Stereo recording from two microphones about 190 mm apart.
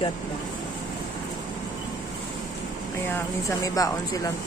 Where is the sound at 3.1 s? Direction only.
15° left (ahead or behind).